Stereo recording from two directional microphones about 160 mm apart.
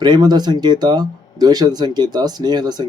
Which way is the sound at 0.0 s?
25° right (ahead or behind).